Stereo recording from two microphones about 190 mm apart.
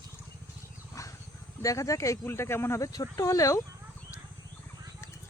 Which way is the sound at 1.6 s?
15° left (ahead or behind).